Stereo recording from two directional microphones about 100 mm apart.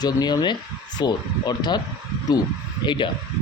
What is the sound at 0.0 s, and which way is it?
Speech, 40° left (ahead or behind).